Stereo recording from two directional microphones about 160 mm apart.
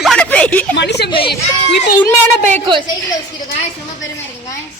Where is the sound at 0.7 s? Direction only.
90° left.